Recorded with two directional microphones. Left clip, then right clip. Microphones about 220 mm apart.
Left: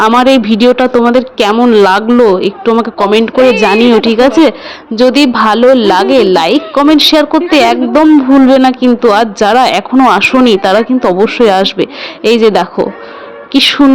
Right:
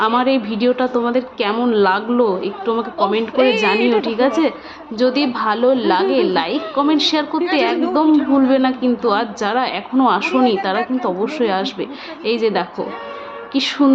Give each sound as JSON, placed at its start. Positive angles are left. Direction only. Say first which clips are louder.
{"t": 0.0, "sound": "a woman's voice", "louder": "left 9 dB", "side_deg": 40}
{"t": 3.3, "sound": "a woman's voice", "louder": "left 7 dB", "side_deg": 15}
{"t": 3.8, "sound": "a woman's voice", "louder": "left 9 dB", "side_deg": 40}